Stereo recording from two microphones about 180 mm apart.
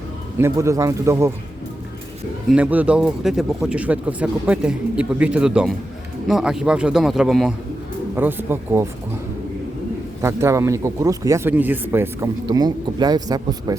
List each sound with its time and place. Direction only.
0.3 s speech: 15° right (ahead or behind)
2.5 s speech: 10° right (ahead or behind)
10.2 s speech: 15° right (ahead or behind)